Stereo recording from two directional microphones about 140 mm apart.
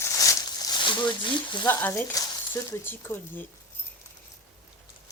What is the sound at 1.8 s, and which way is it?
Speech, 15° left (ahead or behind).